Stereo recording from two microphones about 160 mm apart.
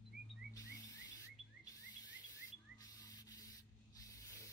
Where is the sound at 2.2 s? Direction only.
20° left (ahead or behind).